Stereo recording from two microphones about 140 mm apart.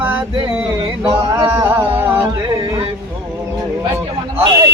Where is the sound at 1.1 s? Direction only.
25° right (ahead or behind).